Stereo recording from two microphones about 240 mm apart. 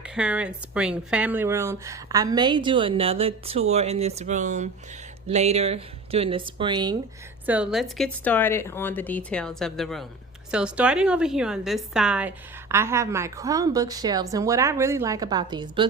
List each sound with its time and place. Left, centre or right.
0.0 s a woman's voice: centre
7.4 s a woman's voice: centre